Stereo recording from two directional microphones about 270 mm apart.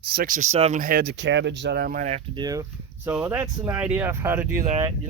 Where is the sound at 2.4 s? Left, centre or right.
Centre.